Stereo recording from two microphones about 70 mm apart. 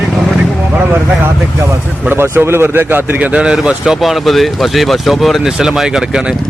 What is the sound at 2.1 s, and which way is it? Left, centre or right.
A man's voice, right.